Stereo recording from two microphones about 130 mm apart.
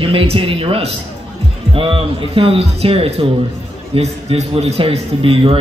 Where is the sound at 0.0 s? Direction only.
45° right (ahead or behind).